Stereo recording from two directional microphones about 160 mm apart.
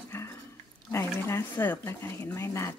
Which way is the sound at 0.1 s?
15° left (ahead or behind).